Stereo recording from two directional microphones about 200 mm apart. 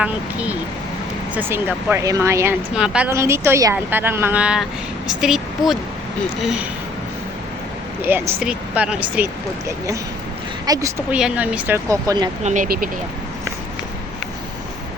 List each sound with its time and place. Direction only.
0.0 s speech: 5° right (ahead or behind)
8.0 s speech: 10° right (ahead or behind)
12.4 s speech: 40° right (ahead or behind)